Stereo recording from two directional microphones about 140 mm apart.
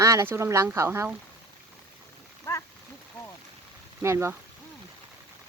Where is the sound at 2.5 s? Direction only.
20° left (ahead or behind).